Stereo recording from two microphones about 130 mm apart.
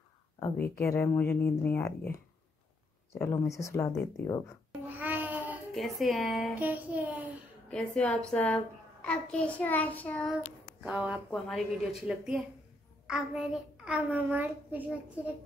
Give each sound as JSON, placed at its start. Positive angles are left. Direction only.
{"t": 0.6, "sound": "a child's voice", "side_deg": 15}
{"t": 4.8, "sound": "babbling", "side_deg": -15}
{"t": 5.8, "sound": "speech", "side_deg": 0}
{"t": 6.5, "sound": "a child's voice", "side_deg": -15}
{"t": 7.7, "sound": "a child's voice", "side_deg": 10}
{"t": 10.8, "sound": "a child's voice", "side_deg": -10}